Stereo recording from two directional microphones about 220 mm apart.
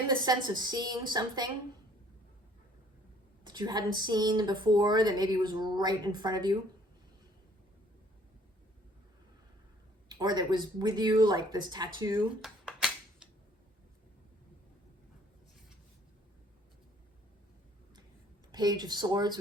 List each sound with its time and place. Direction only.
0.2 s speech: 20° right (ahead or behind)
3.4 s speech: 20° right (ahead or behind)
10.1 s speech: 20° right (ahead or behind)
12.4 s a sound: centre (ahead or behind)
18.5 s speech: 20° right (ahead or behind)